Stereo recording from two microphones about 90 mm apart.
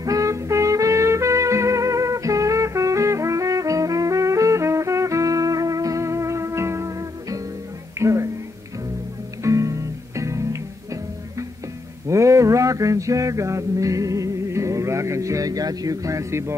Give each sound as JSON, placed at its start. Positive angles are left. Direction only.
{"t": 0.0, "sound": "music", "side_deg": -40}
{"t": 9.4, "sound": "music", "side_deg": -35}
{"t": 12.1, "sound": "a sound", "side_deg": -35}